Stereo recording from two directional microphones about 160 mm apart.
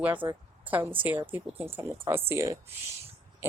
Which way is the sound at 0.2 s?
20° right (ahead or behind).